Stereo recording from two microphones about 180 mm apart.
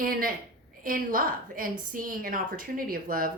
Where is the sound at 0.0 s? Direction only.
50° right (ahead or behind).